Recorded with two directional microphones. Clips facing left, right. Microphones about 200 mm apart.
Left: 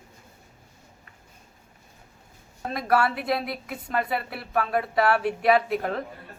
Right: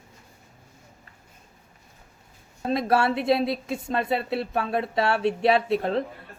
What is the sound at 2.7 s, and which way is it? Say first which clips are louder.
Speech: right 1 dB; 25° right (ahead or behind).